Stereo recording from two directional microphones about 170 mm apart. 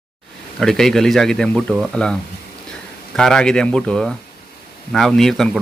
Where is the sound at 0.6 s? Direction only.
Centre (ahead or behind).